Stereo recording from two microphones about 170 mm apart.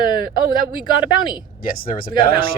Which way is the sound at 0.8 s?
25° left (ahead or behind).